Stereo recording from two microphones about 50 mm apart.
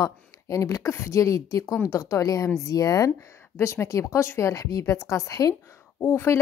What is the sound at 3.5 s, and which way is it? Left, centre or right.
Speech, left.